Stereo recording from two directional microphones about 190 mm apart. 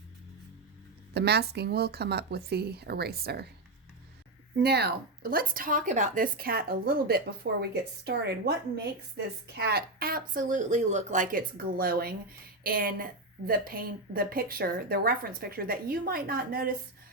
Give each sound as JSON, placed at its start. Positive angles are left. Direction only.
{"t": 1.1, "sound": "speech", "side_deg": -60}
{"t": 4.6, "sound": "speech", "side_deg": -60}